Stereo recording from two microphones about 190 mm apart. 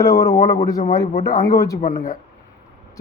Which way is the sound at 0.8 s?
40° left (ahead or behind).